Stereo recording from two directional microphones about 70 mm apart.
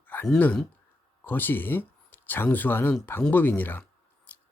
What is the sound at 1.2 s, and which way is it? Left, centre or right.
Speech, left.